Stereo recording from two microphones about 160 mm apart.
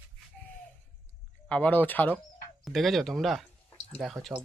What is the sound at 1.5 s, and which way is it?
Speech, 5° left (ahead or behind).